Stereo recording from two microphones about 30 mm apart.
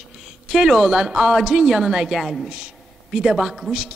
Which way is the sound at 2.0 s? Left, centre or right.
Centre.